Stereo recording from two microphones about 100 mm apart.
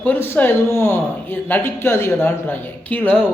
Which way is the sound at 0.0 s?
15° left (ahead or behind).